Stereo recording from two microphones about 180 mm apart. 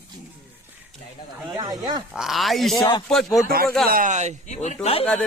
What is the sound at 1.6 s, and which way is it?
Speech, 25° right (ahead or behind).